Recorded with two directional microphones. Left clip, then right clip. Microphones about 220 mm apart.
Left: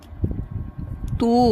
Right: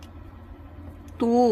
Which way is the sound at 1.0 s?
35° left (ahead or behind).